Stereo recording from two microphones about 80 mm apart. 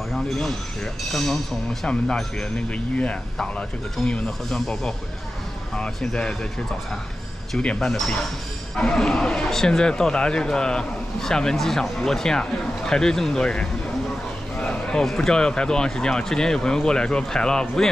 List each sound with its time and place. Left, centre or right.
0.1 s speech: centre
5.9 s speech: centre
7.5 s speech: centre